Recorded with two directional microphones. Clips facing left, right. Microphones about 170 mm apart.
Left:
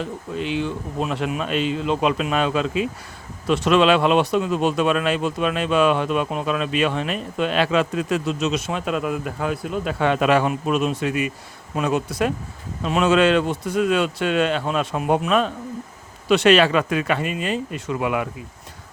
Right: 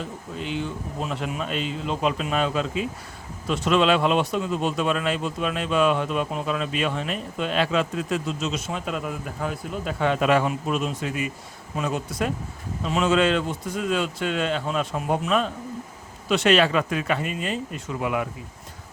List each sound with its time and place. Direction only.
0.3 s speech: 75° left (ahead or behind)